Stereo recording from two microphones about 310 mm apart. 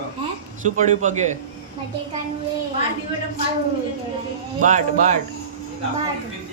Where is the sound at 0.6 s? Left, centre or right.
Right.